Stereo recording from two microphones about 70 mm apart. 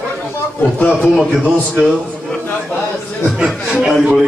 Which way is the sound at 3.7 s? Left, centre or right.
Centre.